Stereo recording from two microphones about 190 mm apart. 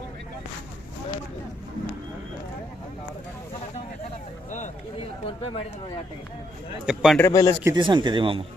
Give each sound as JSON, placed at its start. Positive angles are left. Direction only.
{"t": 5.2, "sound": "speech", "side_deg": 30}
{"t": 6.8, "sound": "speech", "side_deg": -5}
{"t": 7.2, "sound": "speech", "side_deg": 15}
{"t": 7.6, "sound": "speech", "side_deg": -20}